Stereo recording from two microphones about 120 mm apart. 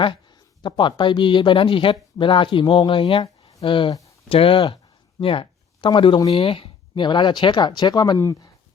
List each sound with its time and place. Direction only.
0.0 s speech: 40° left (ahead or behind)
5.2 s a sound: 45° left (ahead or behind)
5.9 s speech: 40° left (ahead or behind)
6.3 s speech: 50° left (ahead or behind); by 8.4 s 30° left (ahead or behind)